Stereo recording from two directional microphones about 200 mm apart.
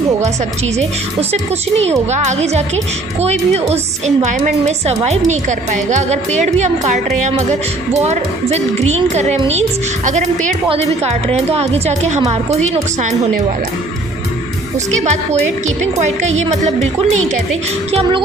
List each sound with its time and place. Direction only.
1.3 s a woman's voice: 30° right (ahead or behind)
15.8 s a woman's voice: 35° right (ahead or behind)